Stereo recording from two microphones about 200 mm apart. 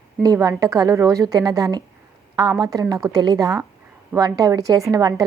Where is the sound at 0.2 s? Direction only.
20° right (ahead or behind).